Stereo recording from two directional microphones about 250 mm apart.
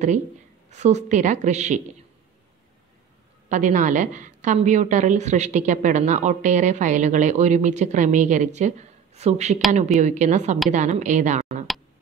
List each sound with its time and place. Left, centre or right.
0.7 s a woman's voice: right
3.4 s a woman's voice: right